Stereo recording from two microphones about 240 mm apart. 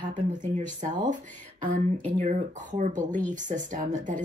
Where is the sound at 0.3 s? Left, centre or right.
Right.